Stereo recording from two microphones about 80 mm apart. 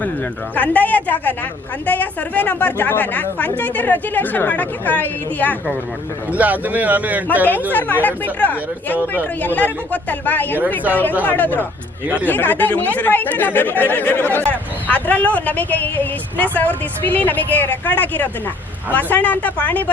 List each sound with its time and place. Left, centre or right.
0.5 s speech: centre
6.3 s a man's voice: centre
7.7 s speech: left
12.0 s a man's voice: centre
12.3 s speech: left